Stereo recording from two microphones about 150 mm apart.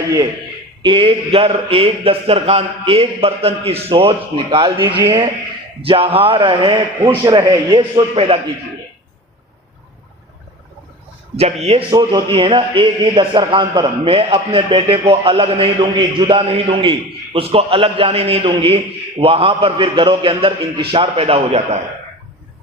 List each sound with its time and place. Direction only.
0.8 s speech: 35° right (ahead or behind)
4.8 s a man's voice: 15° right (ahead or behind)
5.8 s speech: 40° right (ahead or behind)
11.3 s a man's voice: 45° right (ahead or behind)
11.9 s speech: 30° right (ahead or behind)